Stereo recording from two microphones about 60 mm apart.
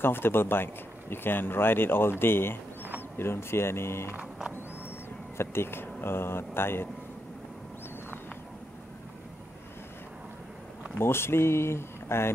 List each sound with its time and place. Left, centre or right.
0.0 s speech: left
5.4 s speech: left
11.0 s speech: left